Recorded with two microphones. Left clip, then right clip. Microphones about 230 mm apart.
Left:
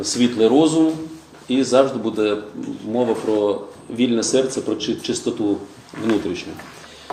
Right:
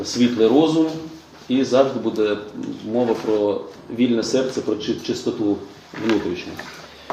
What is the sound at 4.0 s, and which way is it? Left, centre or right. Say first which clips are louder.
Speech: left 1 dB; left.